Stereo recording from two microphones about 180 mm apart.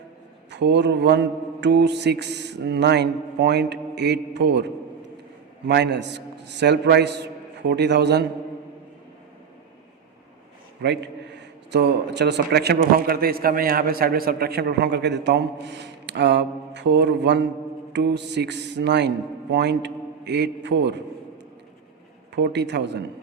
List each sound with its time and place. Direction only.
0.5 s a man's voice: 75° right (ahead or behind)
10.8 s a man's voice: 70° right (ahead or behind)
22.4 s a man's voice: 70° right (ahead or behind)